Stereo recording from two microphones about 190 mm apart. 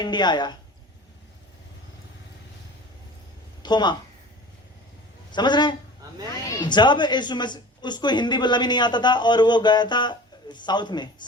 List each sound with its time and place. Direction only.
0.0 s a woman's voice: 25° left (ahead or behind)
3.6 s a woman's voice: 20° left (ahead or behind)
5.3 s a woman's voice: 25° left (ahead or behind)